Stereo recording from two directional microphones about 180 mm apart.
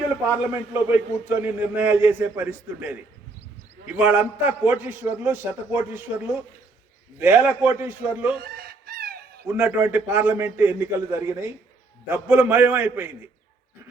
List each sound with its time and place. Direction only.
0.3 s a man's voice: 10° right (ahead or behind)
8.4 s fowl: 55° right (ahead or behind)
9.5 s a man's voice: 10° right (ahead or behind)